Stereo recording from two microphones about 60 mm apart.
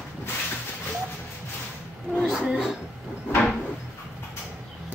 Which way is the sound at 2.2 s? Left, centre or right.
Centre.